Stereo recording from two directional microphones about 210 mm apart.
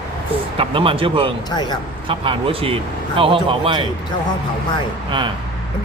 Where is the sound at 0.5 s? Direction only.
25° right (ahead or behind).